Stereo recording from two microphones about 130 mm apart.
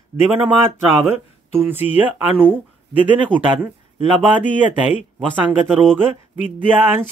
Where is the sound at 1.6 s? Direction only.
15° right (ahead or behind).